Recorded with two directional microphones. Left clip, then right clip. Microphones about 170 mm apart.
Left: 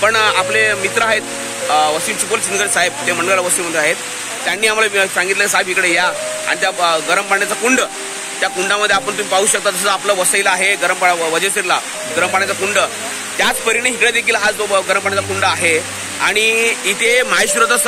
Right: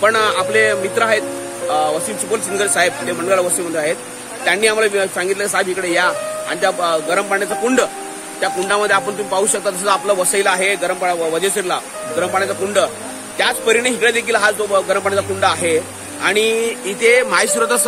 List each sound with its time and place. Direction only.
0.0 s speech: 15° right (ahead or behind)
2.3 s speech: 15° right (ahead or behind)
8.4 s speech: 30° right (ahead or behind)
9.3 s speech: centre (ahead or behind)
10.3 s speech: 20° right (ahead or behind)